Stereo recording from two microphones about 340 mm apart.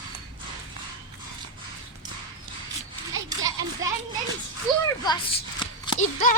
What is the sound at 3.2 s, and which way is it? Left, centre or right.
Children playing, centre.